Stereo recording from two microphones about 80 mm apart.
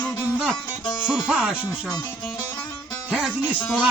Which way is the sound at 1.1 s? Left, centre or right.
Centre.